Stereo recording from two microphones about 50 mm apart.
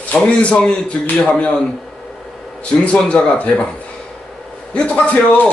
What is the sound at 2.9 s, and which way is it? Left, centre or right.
Speech, left.